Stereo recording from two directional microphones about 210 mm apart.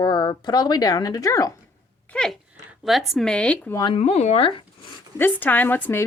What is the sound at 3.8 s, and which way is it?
Speech, 25° left (ahead or behind).